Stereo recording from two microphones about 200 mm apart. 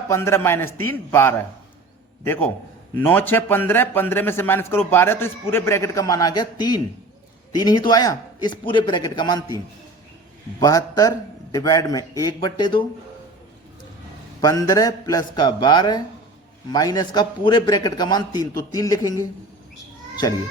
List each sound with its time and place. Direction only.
0.1 s a man's voice: 15° left (ahead or behind)
10.6 s a man's voice: 20° left (ahead or behind)
14.4 s a man's voice: 20° left (ahead or behind)